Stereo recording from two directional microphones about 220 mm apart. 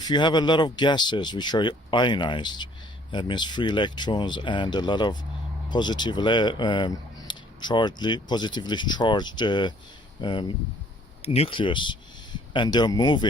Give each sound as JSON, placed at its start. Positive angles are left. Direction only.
{"t": 0.0, "sound": "speech", "side_deg": 20}